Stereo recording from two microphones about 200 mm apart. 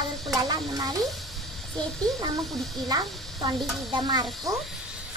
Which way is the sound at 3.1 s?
Centre (ahead or behind).